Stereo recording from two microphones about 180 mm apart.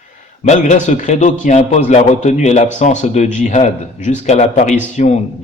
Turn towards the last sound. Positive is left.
turn(degrees=40)  # may be behind; listen again after turning